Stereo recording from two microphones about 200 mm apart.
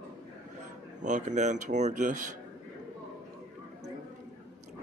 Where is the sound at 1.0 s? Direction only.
35° right (ahead or behind).